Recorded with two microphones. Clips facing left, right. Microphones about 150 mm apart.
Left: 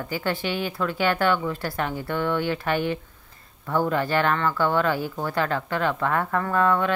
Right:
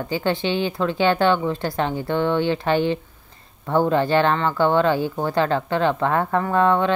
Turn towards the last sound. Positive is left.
turn(degrees=-25)  # may be behind; listen again after turning